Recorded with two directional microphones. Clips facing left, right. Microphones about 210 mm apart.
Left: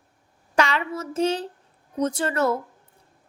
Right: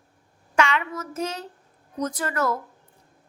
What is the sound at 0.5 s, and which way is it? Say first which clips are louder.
A woman's voice: left 1 dB; 35° left (ahead or behind).